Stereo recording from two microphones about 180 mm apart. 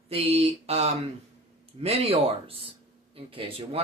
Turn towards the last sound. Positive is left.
turn(degrees=-30)  # may be behind; listen again after turning